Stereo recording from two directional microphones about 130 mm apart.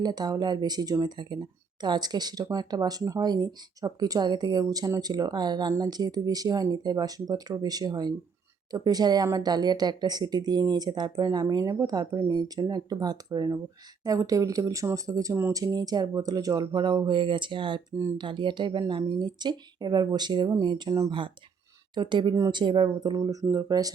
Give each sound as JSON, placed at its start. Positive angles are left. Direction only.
{"t": 0.0, "sound": "speech", "side_deg": -30}
{"t": 21.1, "sound": "speech", "side_deg": -40}